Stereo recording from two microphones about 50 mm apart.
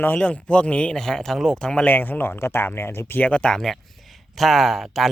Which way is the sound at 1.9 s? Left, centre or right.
Left.